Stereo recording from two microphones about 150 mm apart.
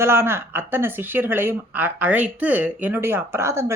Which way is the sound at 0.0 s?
15° right (ahead or behind).